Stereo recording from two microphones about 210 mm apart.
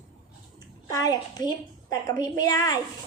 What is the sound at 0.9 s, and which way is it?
A woman's voice, 20° left (ahead or behind).